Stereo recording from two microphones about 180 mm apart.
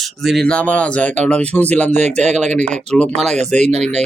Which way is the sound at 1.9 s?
40° right (ahead or behind).